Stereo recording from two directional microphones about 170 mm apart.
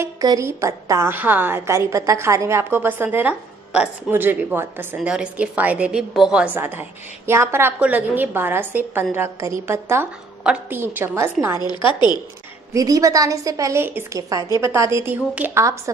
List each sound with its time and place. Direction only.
0.0 s a woman's voice: 20° right (ahead or behind)
11.5 s a woman's voice: 25° left (ahead or behind)
12.7 s a woman's voice: 20° right (ahead or behind)